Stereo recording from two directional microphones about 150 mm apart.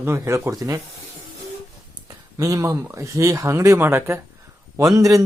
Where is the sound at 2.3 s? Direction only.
20° right (ahead or behind).